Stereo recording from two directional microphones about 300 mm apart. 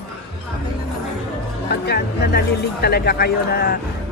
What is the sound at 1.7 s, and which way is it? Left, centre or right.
Speech, left.